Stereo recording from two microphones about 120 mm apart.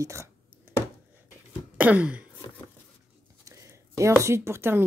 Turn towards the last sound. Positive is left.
turn(degrees=-20)  # may be behind; listen again after turning